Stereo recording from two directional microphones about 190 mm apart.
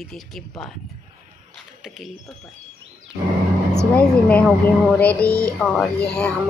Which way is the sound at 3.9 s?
5° left (ahead or behind).